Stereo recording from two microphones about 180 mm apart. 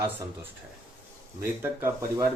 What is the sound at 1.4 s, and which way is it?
Speech, 15° right (ahead or behind).